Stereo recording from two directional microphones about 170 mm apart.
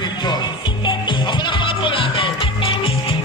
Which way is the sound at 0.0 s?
25° left (ahead or behind).